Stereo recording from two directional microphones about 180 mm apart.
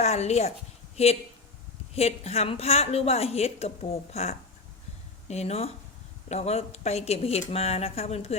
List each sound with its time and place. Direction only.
0.0 s speech: 35° left (ahead or behind)